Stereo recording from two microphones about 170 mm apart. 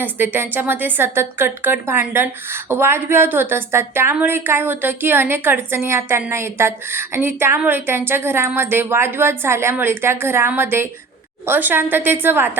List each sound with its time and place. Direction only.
0.0 s a woman's voice: 10° right (ahead or behind)